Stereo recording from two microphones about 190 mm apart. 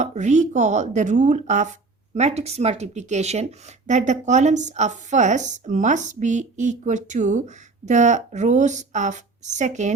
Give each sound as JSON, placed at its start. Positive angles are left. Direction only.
{"t": 0.0, "sound": "speech", "side_deg": -40}